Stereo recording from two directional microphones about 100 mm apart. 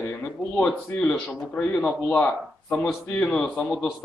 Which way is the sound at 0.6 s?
10° left (ahead or behind).